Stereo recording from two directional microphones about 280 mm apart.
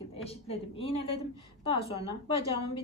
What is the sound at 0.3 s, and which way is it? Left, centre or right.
Speech, left.